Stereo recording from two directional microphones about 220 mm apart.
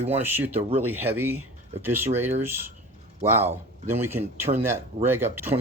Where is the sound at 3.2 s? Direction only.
10° right (ahead or behind).